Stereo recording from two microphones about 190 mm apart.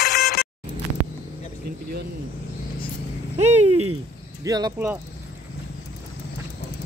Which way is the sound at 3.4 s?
35° right (ahead or behind).